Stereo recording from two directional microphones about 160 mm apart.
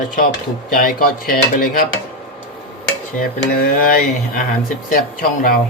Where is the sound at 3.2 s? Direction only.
65° left (ahead or behind).